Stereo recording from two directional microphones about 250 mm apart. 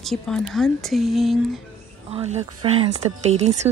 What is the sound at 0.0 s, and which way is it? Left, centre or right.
Speech, centre.